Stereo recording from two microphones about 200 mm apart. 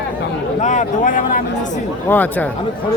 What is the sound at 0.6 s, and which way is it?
Speech, 40° left (ahead or behind).